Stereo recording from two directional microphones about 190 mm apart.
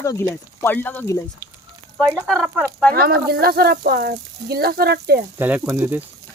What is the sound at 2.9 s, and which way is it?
Speech, 55° right (ahead or behind).